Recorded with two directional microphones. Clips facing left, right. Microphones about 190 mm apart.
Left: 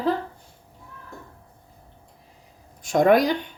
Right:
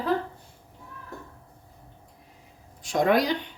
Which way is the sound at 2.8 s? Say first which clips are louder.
Left 5 dB; 50° left (ahead or behind).